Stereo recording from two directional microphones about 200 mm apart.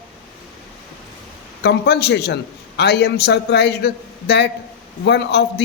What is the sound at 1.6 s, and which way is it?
A man's voice, 55° left (ahead or behind).